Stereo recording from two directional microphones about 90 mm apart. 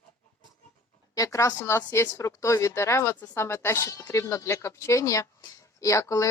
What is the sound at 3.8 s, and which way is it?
Speech, 45° left (ahead or behind).